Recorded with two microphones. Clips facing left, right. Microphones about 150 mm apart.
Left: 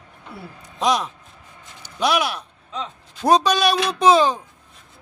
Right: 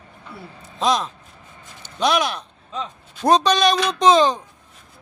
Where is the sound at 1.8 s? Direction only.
10° left (ahead or behind).